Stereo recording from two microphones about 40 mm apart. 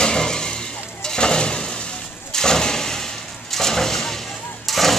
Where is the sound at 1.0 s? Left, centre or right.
Left.